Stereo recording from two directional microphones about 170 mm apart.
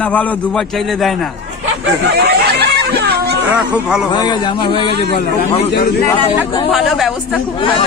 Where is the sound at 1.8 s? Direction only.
75° right (ahead or behind).